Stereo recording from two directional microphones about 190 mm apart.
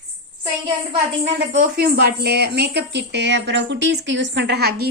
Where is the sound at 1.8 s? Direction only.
55° right (ahead or behind).